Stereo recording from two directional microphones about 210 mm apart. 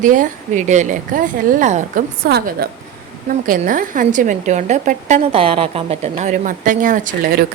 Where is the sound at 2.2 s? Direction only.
50° right (ahead or behind).